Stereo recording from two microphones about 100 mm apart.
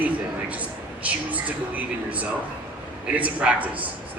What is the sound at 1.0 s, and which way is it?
Speech, 15° right (ahead or behind).